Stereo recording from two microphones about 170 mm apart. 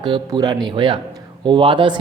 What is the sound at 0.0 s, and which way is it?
Speech, 25° right (ahead or behind).